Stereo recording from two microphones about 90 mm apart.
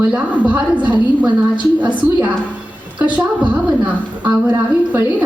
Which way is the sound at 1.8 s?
15° right (ahead or behind).